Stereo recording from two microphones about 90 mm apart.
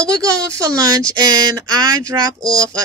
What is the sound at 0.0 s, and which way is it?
Speech, 40° right (ahead or behind).